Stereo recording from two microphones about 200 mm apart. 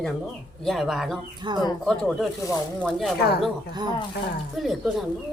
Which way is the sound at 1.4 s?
20° right (ahead or behind).